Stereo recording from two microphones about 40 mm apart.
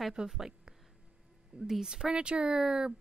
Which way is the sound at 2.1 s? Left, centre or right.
Right.